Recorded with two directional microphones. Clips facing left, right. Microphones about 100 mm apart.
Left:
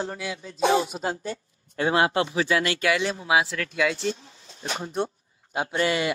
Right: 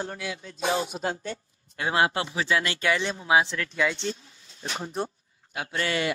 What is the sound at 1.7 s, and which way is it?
Speech, 30° left (ahead or behind).